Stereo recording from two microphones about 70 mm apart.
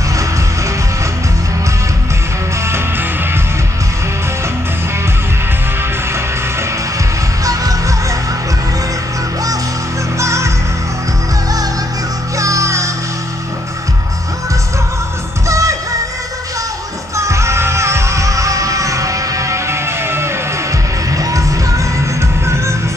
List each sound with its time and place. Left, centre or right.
2.6 s music: right
7.4 s music: right
10.1 s music: right
12.4 s music: right
15.4 s music: right
17.2 s music: right
21.1 s music: right